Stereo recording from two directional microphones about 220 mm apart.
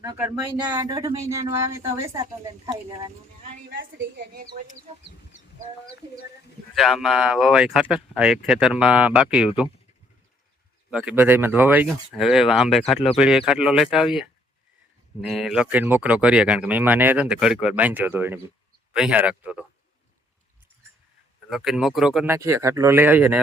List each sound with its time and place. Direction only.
0.2 s speech: 15° right (ahead or behind)
3.7 s speech: 55° right (ahead or behind)
6.7 s speech: centre (ahead or behind)
10.9 s speech: 5° right (ahead or behind)
21.5 s speech: centre (ahead or behind)